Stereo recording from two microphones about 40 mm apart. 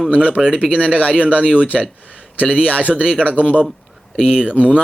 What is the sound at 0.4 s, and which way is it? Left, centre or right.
Speech, right.